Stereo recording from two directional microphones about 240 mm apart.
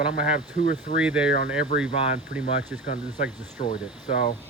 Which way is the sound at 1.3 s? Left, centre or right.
Left.